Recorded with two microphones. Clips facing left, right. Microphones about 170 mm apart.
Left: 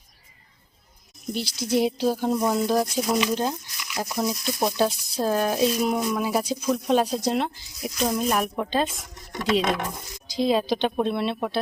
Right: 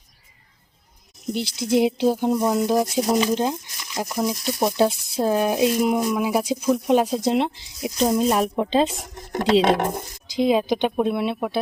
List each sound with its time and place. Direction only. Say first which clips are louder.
1.3 s speech: right 3 dB; 20° right (ahead or behind)
2.9 s speech: right 3 dB; 35° right (ahead or behind)
3.3 s speech: right 3 dB; 20° right (ahead or behind)
4.6 s speech: right 3 dB; 25° right (ahead or behind)
7.3 s speech: right 4 dB; 25° right (ahead or behind)
9.7 s stir: right 7 dB; 45° right (ahead or behind)
10.4 s speech: right 3 dB; 15° right (ahead or behind)